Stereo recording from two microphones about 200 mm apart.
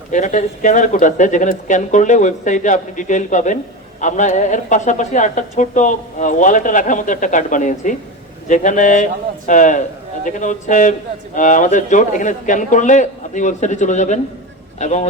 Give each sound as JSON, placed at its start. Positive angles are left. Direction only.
{"t": 0.1, "sound": "a woman's voice", "side_deg": 40}